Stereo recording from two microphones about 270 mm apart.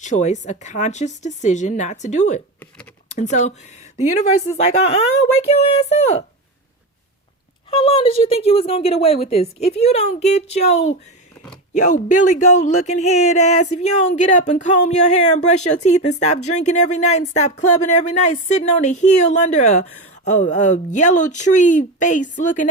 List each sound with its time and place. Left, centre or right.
0.0 s speech: left
4.4 s speech: left
7.7 s speech: centre